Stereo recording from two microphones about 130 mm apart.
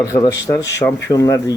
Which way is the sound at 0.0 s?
25° left (ahead or behind).